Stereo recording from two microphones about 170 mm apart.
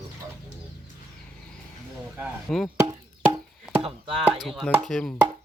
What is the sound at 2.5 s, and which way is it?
Speech, 5° left (ahead or behind).